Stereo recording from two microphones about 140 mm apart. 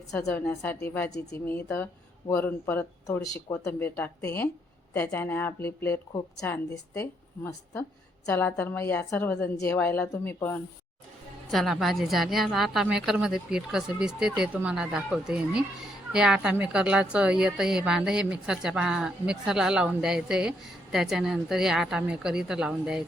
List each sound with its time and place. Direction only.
0.1 s a woman's voice: 5° left (ahead or behind)
0.4 s speech: 20° left (ahead or behind)
11.5 s a woman's voice: centre (ahead or behind)